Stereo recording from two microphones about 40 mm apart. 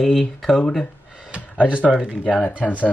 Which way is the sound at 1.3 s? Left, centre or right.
Right.